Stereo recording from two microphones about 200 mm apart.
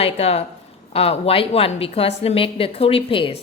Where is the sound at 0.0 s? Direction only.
30° left (ahead or behind).